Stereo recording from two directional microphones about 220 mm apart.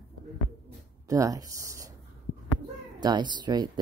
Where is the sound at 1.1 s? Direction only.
15° right (ahead or behind).